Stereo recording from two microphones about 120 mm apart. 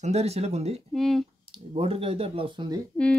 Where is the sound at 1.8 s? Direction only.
50° right (ahead or behind).